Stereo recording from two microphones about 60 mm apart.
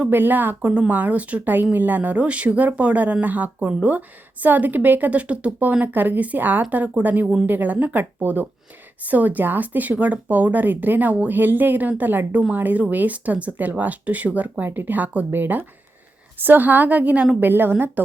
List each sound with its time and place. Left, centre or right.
0.1 s speech: right
0.7 s speech: centre
4.4 s speech: right